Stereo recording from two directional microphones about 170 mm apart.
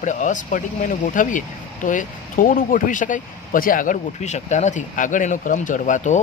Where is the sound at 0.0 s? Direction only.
45° left (ahead or behind).